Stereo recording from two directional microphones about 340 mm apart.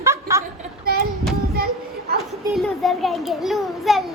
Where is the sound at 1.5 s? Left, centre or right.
Right.